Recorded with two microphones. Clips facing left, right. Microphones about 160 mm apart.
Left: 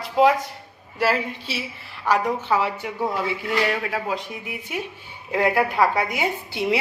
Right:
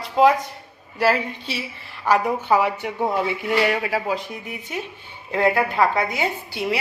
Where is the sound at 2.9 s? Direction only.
25° right (ahead or behind).